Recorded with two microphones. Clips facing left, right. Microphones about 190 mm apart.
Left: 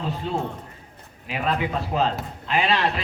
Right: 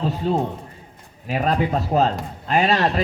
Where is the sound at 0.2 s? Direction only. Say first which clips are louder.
Right 6 dB; 45° right (ahead or behind).